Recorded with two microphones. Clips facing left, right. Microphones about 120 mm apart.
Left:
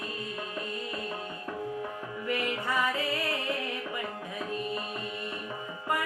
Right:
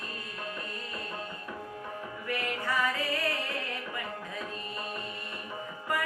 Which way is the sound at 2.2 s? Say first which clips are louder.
Left 2 dB; 20° left (ahead or behind).